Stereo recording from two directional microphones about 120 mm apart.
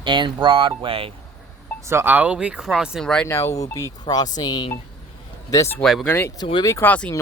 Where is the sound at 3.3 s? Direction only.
20° left (ahead or behind).